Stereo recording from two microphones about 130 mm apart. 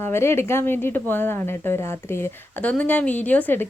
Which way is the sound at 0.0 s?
20° left (ahead or behind).